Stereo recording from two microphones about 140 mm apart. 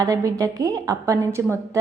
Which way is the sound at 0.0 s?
25° right (ahead or behind).